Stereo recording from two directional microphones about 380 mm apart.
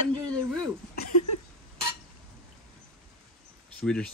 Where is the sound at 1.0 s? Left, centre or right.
Left.